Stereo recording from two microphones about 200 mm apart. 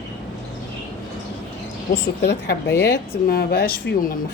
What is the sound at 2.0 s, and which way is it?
A woman's voice, 55° left (ahead or behind).